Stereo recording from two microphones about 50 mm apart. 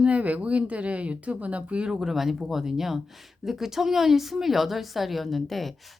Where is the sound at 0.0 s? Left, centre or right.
Right.